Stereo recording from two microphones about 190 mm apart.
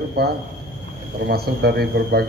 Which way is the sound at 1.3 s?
55° right (ahead or behind).